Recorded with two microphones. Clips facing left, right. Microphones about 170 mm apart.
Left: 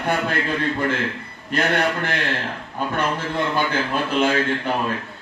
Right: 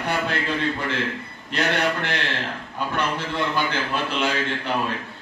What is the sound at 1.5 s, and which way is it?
A man's voice, 50° left (ahead or behind).